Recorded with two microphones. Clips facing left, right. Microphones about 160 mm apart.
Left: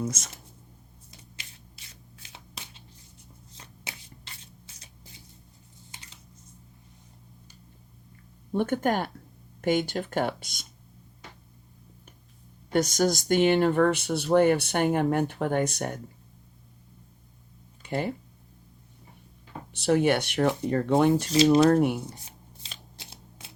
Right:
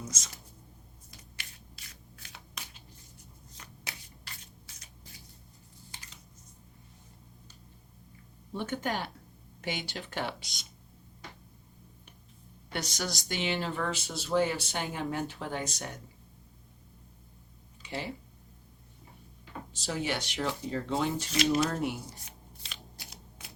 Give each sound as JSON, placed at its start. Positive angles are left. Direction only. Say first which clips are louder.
{"t": 0.0, "sound": "speech", "louder": "left 11 dB", "side_deg": 55}
{"t": 1.4, "sound": "a sound", "louder": "even", "side_deg": 25}
{"t": 3.6, "sound": "shuffling cards", "louder": "left 2 dB", "side_deg": 25}
{"t": 8.5, "sound": "speech", "louder": "left 8 dB", "side_deg": 50}
{"t": 12.7, "sound": "speech", "louder": "left 12 dB", "side_deg": 45}
{"t": 17.8, "sound": "speech", "louder": "left 8 dB", "side_deg": 50}
{"t": 19.7, "sound": "speech", "louder": "left 11 dB", "side_deg": 65}
{"t": 23.0, "sound": "a sound", "louder": "left 1 dB", "side_deg": 25}